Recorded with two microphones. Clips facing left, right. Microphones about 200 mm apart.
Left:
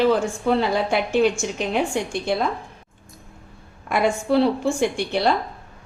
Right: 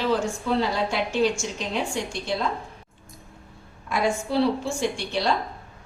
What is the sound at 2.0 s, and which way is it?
Speech, 55° left (ahead or behind).